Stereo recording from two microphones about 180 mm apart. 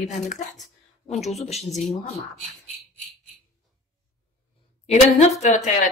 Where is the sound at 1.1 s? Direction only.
Centre (ahead or behind).